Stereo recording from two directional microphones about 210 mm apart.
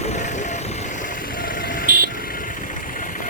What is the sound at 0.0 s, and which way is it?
Vehicle, 35° left (ahead or behind).